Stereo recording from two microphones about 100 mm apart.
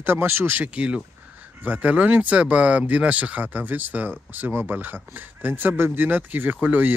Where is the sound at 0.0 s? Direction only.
20° right (ahead or behind).